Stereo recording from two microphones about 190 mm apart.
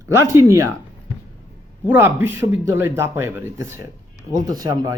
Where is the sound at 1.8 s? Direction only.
10° right (ahead or behind).